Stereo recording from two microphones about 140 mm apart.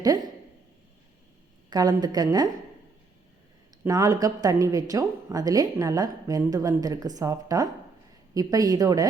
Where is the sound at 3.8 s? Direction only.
25° right (ahead or behind).